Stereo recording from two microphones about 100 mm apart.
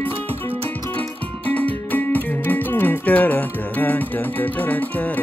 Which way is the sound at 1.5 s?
15° left (ahead or behind).